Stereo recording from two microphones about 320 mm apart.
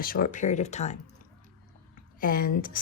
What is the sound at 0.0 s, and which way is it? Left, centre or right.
Speech, left.